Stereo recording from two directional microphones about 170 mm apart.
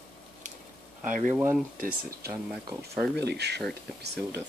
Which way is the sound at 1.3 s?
10° right (ahead or behind).